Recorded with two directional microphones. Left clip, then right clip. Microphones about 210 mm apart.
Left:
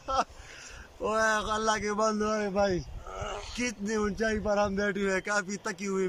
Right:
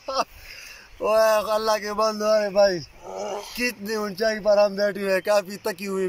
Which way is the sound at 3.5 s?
Centre (ahead or behind).